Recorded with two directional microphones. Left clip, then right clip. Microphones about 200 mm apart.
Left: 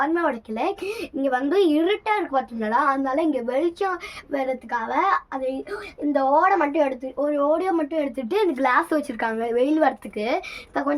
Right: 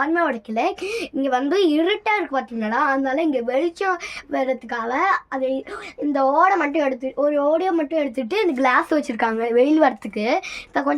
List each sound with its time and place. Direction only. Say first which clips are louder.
0.0 s speech: right 2 dB; 50° right (ahead or behind)